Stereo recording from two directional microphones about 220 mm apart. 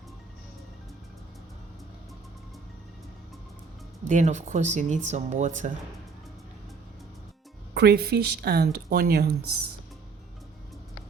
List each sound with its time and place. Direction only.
4.0 s speech: 35° right (ahead or behind)
7.7 s speech: 50° right (ahead or behind)